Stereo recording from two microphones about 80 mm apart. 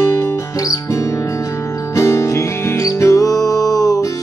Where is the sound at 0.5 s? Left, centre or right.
Left.